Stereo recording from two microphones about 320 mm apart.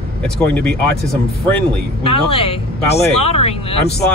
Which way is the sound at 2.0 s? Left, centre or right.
Centre.